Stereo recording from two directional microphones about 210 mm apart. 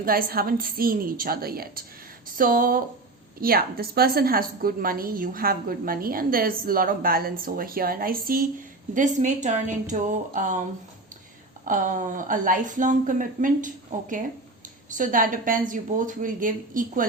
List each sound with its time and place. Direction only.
0.0 s a woman's voice: 45° right (ahead or behind)
11.6 s a woman's voice: 40° right (ahead or behind)